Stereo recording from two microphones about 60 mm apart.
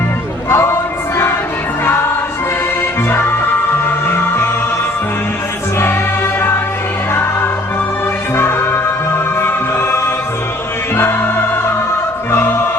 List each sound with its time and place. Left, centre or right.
0.5 s a sound: left
3.1 s music: left
8.4 s music: left
10.9 s music: left